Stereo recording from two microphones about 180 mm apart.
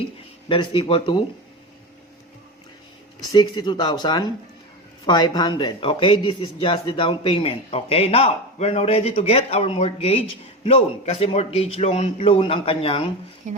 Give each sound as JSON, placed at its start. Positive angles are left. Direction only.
{"t": 0.4, "sound": "speech", "side_deg": 30}
{"t": 3.3, "sound": "speech", "side_deg": 25}